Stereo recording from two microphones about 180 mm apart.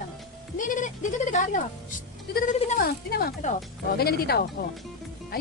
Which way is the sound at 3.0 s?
55° left (ahead or behind).